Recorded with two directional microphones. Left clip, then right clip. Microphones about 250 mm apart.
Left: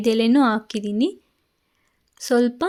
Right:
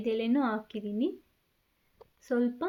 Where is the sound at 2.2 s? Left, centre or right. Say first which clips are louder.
Left 11 dB; left.